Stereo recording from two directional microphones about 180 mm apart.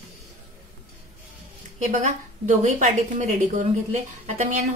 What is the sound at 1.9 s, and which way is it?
A woman's voice, 40° right (ahead or behind).